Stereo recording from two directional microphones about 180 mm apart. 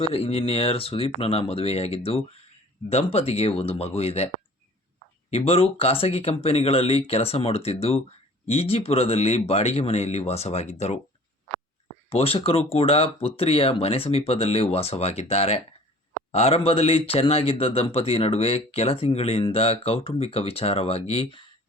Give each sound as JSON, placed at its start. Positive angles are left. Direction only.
{"t": 0.0, "sound": "speech", "side_deg": 30}
{"t": 5.3, "sound": "speech", "side_deg": 30}
{"t": 12.0, "sound": "speech", "side_deg": 30}